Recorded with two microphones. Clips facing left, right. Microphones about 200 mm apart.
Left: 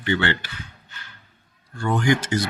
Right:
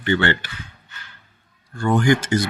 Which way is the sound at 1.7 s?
50° right (ahead or behind).